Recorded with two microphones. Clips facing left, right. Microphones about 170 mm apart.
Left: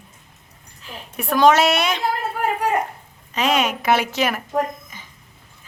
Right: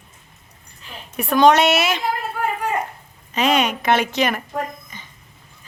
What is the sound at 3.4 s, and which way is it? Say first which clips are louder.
Speech: right 1 dB; centre (ahead or behind).